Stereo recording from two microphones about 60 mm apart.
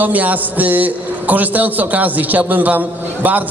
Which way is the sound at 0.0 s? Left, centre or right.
Right.